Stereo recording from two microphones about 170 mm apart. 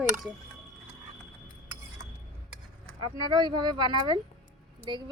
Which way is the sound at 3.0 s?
25° right (ahead or behind).